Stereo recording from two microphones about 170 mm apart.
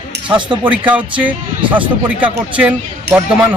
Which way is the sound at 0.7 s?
10° right (ahead or behind).